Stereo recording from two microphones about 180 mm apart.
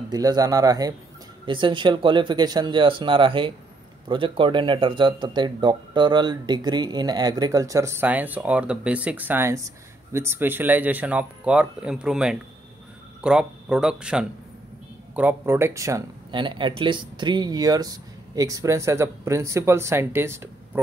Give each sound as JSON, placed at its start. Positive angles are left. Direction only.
{"t": 0.1, "sound": "speech", "side_deg": -20}